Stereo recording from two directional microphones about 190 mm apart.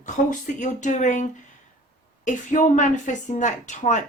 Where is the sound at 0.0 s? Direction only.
40° left (ahead or behind).